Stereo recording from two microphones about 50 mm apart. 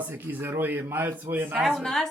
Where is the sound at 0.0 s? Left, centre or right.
Right.